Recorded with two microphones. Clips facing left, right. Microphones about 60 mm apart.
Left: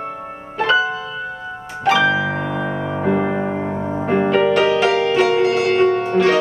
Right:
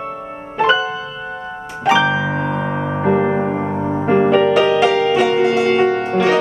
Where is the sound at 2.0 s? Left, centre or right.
Centre.